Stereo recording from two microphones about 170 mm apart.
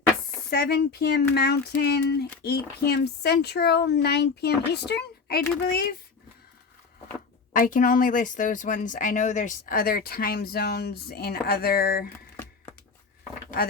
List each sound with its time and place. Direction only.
0.5 s speech: 75° left (ahead or behind)
5.6 s speech: 65° left (ahead or behind)
7.5 s speech: 50° left (ahead or behind)